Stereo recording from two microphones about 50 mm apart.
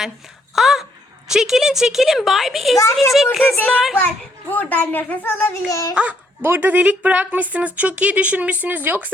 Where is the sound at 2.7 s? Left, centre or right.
Left.